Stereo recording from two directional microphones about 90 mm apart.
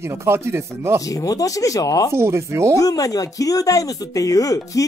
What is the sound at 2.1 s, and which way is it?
Speech, 30° right (ahead or behind).